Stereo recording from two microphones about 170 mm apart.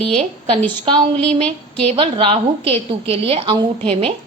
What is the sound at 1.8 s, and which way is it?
A woman's voice, 30° right (ahead or behind).